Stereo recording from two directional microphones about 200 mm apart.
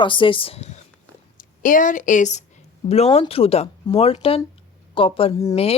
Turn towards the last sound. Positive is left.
turn(degrees=30)  # may be behind; listen again after turning